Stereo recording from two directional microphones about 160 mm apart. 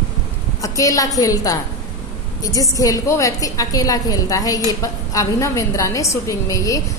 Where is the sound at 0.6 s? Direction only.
20° left (ahead or behind).